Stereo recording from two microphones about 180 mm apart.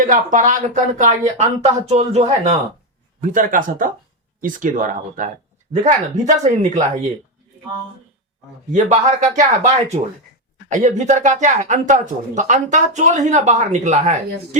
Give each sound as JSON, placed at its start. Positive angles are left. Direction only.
{"t": 0.1, "sound": "speech", "side_deg": -45}
{"t": 8.7, "sound": "speech", "side_deg": -40}